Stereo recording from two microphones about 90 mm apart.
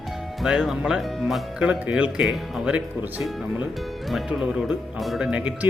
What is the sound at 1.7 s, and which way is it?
Speech, 15° right (ahead or behind).